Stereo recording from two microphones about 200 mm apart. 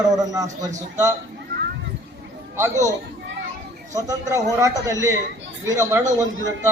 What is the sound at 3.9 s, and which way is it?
A man's voice, 15° right (ahead or behind).